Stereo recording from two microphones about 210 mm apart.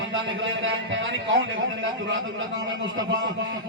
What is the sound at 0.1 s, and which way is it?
A man's voice, 65° right (ahead or behind).